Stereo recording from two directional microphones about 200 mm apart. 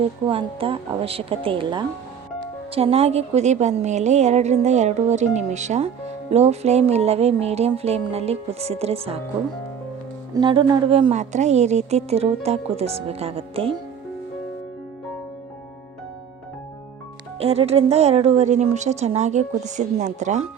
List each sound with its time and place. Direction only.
0.0 s a woman's voice: 25° right (ahead or behind)
10.3 s a woman's voice: 25° right (ahead or behind)
17.3 s a woman's voice: 30° right (ahead or behind)